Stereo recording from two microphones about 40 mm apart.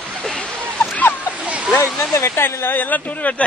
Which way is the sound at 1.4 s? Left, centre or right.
Right.